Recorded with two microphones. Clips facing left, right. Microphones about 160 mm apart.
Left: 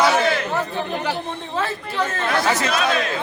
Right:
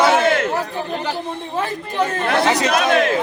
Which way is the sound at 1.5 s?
15° right (ahead or behind).